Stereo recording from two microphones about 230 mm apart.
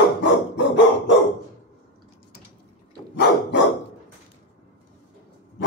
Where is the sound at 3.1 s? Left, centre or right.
Left.